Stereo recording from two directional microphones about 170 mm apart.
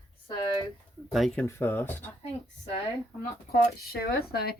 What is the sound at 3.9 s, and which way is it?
Speech, 65° left (ahead or behind).